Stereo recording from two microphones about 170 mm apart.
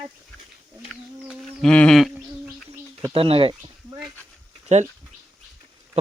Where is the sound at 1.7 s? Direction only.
5° left (ahead or behind).